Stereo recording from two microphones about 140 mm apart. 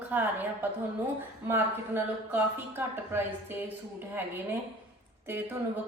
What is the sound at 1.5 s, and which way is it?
A woman's voice, 15° right (ahead or behind).